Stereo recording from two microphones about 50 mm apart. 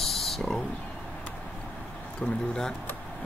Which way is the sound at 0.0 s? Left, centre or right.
Centre.